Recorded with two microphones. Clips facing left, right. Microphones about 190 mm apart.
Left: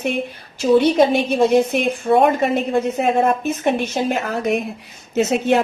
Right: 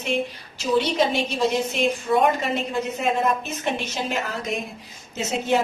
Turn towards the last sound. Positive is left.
turn(degrees=65)  # may be behind; listen again after turning